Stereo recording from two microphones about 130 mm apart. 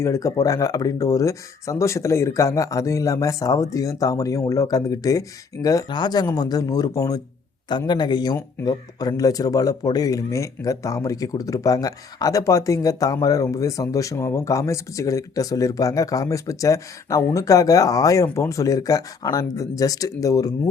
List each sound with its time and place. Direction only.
0.0 s a man's voice: 25° left (ahead or behind)